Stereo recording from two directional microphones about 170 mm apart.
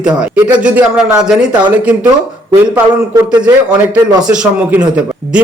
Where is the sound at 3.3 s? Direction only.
25° right (ahead or behind).